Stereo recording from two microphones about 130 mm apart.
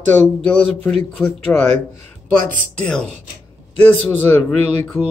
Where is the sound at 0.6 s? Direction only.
15° left (ahead or behind).